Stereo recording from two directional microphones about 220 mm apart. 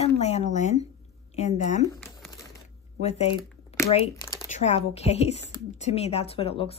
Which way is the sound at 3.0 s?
30° left (ahead or behind).